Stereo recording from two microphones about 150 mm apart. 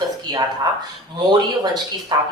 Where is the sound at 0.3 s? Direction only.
25° right (ahead or behind).